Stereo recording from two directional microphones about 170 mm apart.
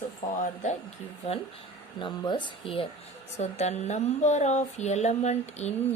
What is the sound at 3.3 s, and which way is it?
Speech, 40° left (ahead or behind).